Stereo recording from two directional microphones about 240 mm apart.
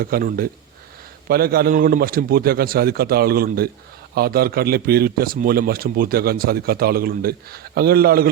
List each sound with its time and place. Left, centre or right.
0.0 s a man's voice: right